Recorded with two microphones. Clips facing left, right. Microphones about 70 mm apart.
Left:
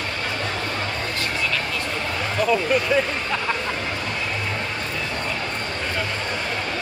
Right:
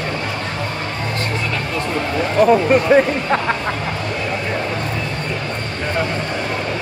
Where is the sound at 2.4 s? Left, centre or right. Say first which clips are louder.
Right 8 dB; right.